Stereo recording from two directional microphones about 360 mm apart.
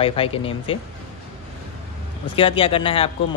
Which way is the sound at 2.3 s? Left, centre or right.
Centre.